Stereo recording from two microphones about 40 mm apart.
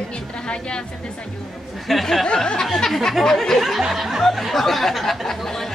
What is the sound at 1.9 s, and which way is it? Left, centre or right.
Speech, centre.